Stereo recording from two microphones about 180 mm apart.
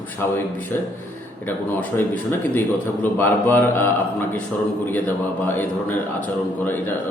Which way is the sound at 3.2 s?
10° left (ahead or behind).